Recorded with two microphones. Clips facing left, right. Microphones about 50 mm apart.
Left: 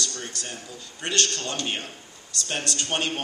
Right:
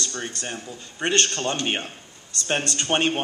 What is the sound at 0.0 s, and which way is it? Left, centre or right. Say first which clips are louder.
Speech: right 3 dB; right.